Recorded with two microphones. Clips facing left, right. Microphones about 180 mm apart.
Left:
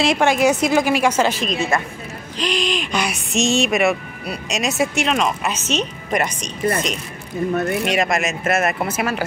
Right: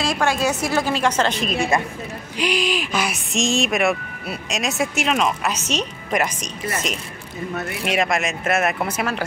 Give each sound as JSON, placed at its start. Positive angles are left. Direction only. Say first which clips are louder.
{"t": 0.0, "sound": "a woman's voice", "louder": "left 5 dB", "side_deg": 25}
{"t": 1.4, "sound": "speech", "louder": "even", "side_deg": -5}
{"t": 7.8, "sound": "speech", "louder": "left 2 dB", "side_deg": 0}